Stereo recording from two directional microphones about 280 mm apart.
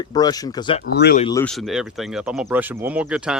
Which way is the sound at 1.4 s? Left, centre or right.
Centre.